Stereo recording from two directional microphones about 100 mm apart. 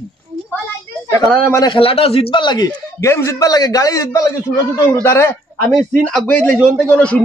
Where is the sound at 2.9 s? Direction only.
30° left (ahead or behind).